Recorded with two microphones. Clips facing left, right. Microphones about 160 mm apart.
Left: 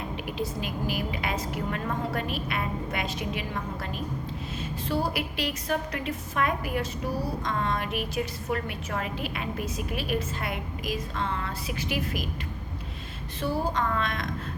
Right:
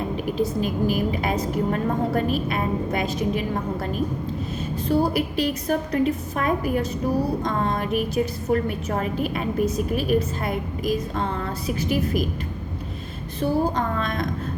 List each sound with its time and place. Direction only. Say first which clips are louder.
0.3 s a woman's voice: right 9 dB; 45° right (ahead or behind)
13.4 s a woman's voice: right 5 dB; 40° right (ahead or behind)